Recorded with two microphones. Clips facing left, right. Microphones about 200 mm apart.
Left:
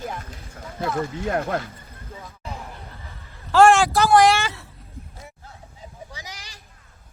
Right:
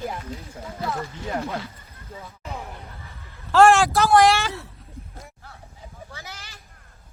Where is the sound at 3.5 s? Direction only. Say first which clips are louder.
Left 1 dB; centre (ahead or behind).